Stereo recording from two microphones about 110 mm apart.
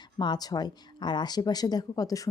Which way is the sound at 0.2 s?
40° left (ahead or behind).